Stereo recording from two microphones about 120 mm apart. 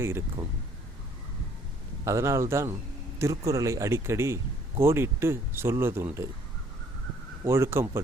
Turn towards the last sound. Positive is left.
turn(degrees=-20)  # may be behind; listen again after turning